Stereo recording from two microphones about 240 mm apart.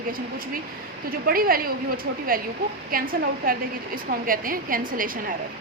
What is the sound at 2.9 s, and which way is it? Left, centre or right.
A woman's voice, right.